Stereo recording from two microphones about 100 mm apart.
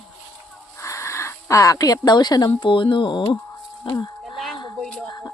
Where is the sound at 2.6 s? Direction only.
55° left (ahead or behind).